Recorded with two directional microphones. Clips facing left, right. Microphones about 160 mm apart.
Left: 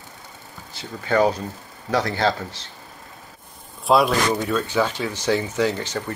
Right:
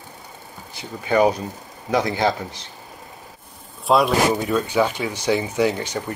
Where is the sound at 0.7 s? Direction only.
15° right (ahead or behind).